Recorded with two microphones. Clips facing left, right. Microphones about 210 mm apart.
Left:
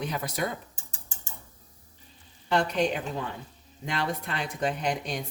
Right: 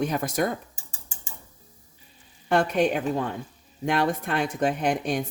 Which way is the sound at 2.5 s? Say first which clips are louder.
Right 4 dB; 50° right (ahead or behind).